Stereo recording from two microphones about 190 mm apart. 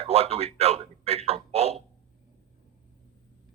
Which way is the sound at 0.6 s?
35° right (ahead or behind).